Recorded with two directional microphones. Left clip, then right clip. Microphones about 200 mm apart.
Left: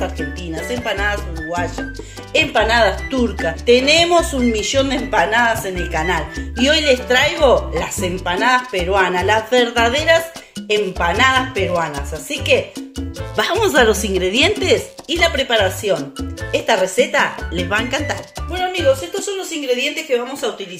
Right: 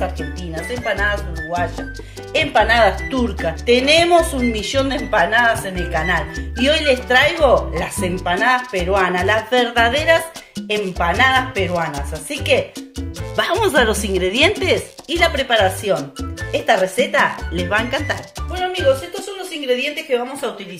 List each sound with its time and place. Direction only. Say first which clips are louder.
0.8 s speech: right 2 dB; 20° left (ahead or behind)
2.3 s a woman's voice: even; centre (ahead or behind)
5.1 s speech: right 1 dB; 20° left (ahead or behind)
6.5 s a woman's voice: left 1 dB; centre (ahead or behind)
18.5 s music: left 1 dB; 15° left (ahead or behind)
19.8 s speech: left 1 dB; 10° left (ahead or behind)